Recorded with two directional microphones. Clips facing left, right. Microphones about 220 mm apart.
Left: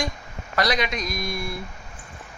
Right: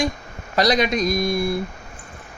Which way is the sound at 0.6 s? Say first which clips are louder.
Right 6 dB; 40° right (ahead or behind).